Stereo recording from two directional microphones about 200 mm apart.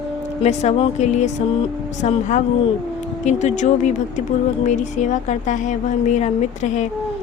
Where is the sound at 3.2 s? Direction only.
35° left (ahead or behind).